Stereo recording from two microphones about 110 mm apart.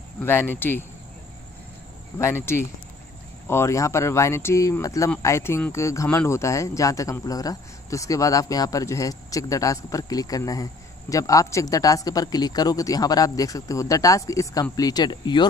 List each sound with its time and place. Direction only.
0.2 s speech: 20° left (ahead or behind)
2.1 s speech: 25° left (ahead or behind); by 15.4 s 45° left (ahead or behind)